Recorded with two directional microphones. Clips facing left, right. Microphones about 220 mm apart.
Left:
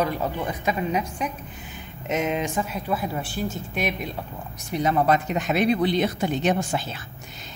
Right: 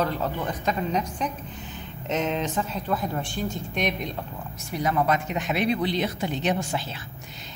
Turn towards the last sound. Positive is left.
turn(degrees=50)  # may be behind; listen again after turning